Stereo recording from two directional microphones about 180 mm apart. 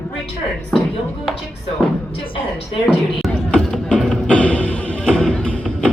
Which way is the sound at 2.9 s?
5° left (ahead or behind).